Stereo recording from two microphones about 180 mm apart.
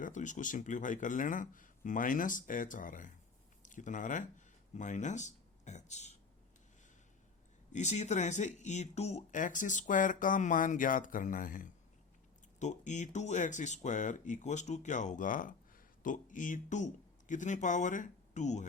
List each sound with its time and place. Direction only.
0.0 s speech: 45° left (ahead or behind)
7.7 s speech: 40° left (ahead or behind)